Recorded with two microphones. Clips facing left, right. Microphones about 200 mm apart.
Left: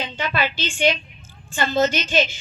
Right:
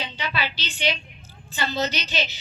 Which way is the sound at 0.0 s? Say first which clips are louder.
Left 5 dB; 50° left (ahead or behind).